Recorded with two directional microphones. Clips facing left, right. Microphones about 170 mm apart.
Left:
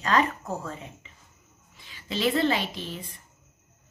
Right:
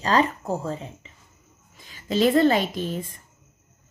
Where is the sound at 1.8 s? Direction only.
45° right (ahead or behind).